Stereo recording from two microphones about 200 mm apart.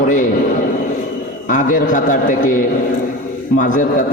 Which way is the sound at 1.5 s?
40° left (ahead or behind).